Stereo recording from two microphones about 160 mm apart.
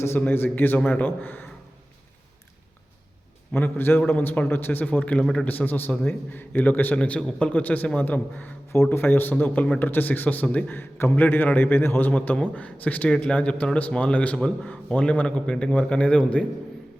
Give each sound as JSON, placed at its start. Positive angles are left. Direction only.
{"t": 0.0, "sound": "a man's voice", "side_deg": 15}
{"t": 3.5, "sound": "a man's voice", "side_deg": 15}